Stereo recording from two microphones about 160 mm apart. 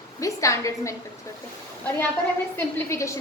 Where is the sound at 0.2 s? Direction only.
20° left (ahead or behind).